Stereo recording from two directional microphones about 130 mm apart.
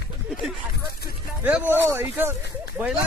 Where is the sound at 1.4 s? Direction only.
15° right (ahead or behind).